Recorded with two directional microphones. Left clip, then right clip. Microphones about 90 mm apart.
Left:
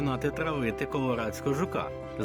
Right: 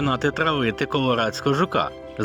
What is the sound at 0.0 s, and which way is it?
Speech, 50° right (ahead or behind).